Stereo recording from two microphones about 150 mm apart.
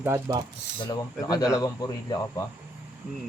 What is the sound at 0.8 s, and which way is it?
Speech, 25° left (ahead or behind).